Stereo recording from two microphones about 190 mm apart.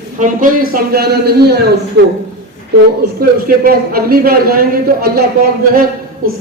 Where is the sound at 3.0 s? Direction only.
50° right (ahead or behind).